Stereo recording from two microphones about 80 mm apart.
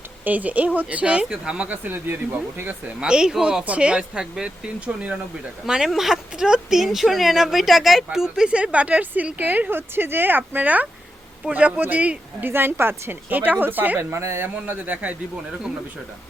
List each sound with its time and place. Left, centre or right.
0.3 s speech: centre
3.0 s speech: centre
14.0 s speech: right; by 15.1 s centre